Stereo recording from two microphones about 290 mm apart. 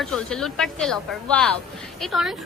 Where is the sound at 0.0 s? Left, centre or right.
Centre.